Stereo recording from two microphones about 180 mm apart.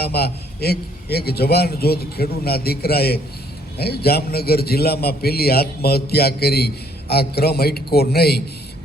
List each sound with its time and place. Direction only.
0.0 s a man's voice: 60° left (ahead or behind)